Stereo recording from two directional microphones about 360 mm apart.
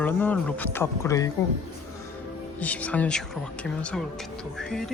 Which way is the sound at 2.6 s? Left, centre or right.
Centre.